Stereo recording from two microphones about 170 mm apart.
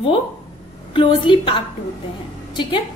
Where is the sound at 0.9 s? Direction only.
30° left (ahead or behind).